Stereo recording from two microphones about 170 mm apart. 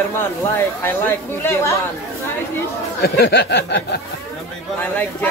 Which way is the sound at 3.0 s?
70° left (ahead or behind).